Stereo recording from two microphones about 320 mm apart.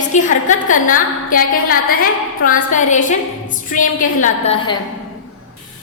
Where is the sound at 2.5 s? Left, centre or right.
Left.